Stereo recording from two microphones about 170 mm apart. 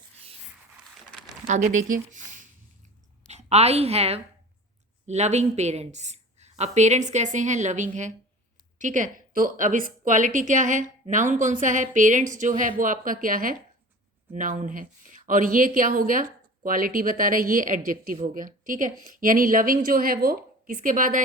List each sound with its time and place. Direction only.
1.5 s a woman's voice: 45° right (ahead or behind)